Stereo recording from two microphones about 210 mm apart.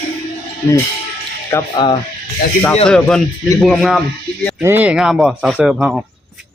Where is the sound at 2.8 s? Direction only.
5° left (ahead or behind).